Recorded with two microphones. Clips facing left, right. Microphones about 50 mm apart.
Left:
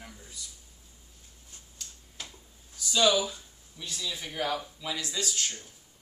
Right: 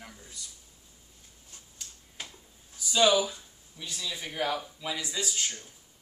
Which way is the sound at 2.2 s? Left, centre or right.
Right.